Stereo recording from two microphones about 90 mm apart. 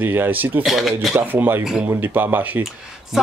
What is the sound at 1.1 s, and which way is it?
Speech, 20° right (ahead or behind).